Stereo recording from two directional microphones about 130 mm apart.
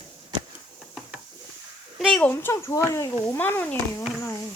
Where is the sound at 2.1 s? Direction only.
15° left (ahead or behind).